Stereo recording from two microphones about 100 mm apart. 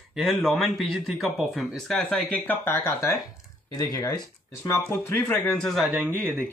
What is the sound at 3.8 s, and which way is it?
Speech, 40° left (ahead or behind).